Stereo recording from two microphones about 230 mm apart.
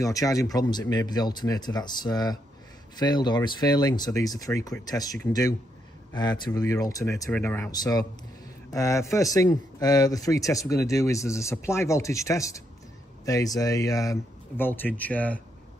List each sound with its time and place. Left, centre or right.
0.0 s speech: centre